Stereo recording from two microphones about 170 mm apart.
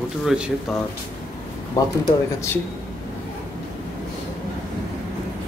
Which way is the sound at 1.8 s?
20° left (ahead or behind).